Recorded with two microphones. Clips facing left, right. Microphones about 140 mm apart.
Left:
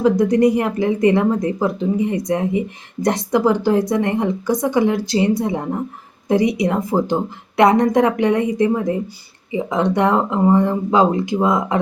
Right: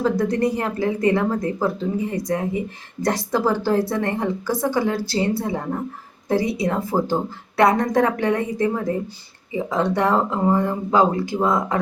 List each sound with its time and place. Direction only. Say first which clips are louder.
0.0 s a woman's voice: left 6 dB; 15° left (ahead or behind)